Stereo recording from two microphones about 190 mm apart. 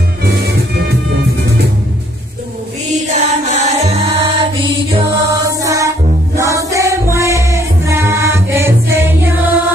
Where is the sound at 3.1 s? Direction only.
40° right (ahead or behind).